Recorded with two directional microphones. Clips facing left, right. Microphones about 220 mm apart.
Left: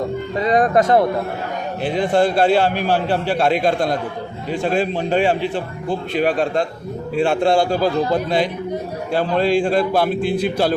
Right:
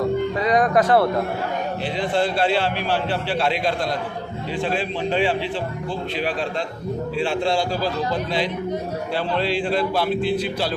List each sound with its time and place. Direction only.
0.3 s music: 25° left (ahead or behind)
1.8 s a man's voice: 50° left (ahead or behind)